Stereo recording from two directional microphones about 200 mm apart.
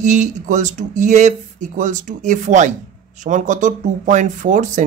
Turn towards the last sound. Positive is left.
turn(degrees=-40)  # may be behind; listen again after turning